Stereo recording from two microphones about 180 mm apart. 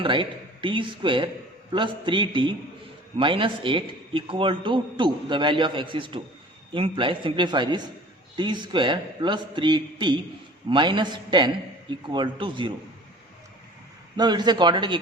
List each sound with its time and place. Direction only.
0.0 s a man's voice: 25° right (ahead or behind)
14.2 s a man's voice: 25° right (ahead or behind)